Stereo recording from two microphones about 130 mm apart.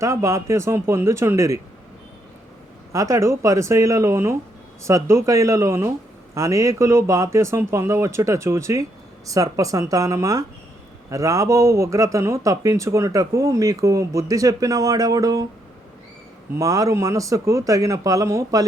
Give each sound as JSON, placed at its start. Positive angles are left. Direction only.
{"t": 0.0, "sound": "speech", "side_deg": -25}
{"t": 2.9, "sound": "speech", "side_deg": -25}
{"t": 16.6, "sound": "speech", "side_deg": -25}